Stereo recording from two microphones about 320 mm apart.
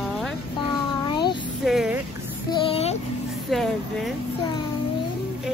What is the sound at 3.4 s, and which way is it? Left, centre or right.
Vehicle, centre.